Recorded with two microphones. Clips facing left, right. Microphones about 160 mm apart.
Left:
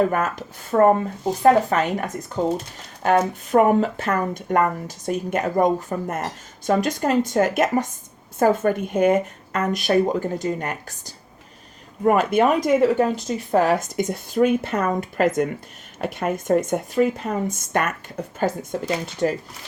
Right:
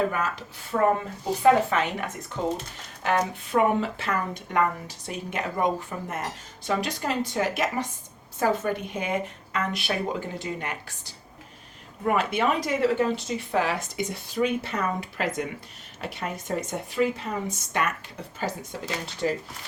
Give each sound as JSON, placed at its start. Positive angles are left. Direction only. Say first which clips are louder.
{"t": 0.1, "sound": "speech", "louder": "left 6 dB", "side_deg": 50}